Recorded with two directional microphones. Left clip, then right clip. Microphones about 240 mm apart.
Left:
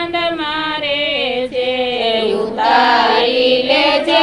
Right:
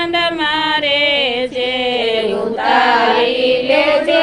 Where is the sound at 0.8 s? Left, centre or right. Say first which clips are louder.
Right 3 dB; right.